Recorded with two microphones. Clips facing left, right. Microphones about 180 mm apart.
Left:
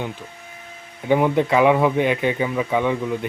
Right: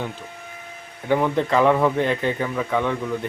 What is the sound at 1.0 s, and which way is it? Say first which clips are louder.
Speech: left 3 dB; 15° left (ahead or behind).